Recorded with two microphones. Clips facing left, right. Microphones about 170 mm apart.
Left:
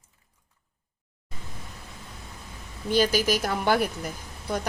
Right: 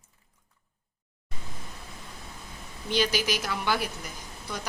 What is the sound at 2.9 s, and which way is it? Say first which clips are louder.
Speech: left 5 dB; 45° left (ahead or behind).